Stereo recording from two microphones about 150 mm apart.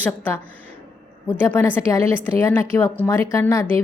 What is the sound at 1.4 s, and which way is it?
A woman's voice, 10° left (ahead or behind).